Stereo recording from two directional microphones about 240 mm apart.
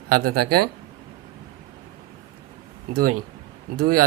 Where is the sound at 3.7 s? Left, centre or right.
Right.